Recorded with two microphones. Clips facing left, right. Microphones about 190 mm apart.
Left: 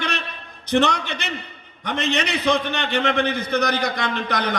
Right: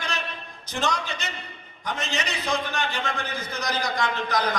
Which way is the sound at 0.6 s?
65° left (ahead or behind).